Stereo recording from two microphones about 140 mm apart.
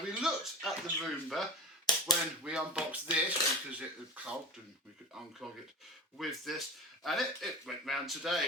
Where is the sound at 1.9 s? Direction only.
30° left (ahead or behind).